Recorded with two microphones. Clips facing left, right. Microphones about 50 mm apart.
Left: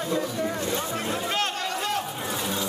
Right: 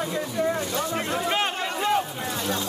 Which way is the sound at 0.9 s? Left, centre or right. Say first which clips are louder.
Right 2 dB; centre.